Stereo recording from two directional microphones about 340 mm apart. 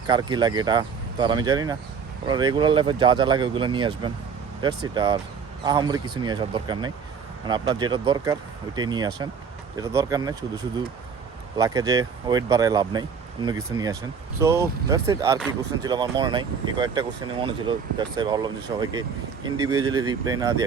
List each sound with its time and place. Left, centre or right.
0.1 s speech: centre
11.5 s speech: centre